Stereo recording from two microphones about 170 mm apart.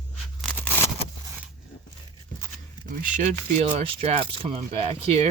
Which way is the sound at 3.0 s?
45° right (ahead or behind).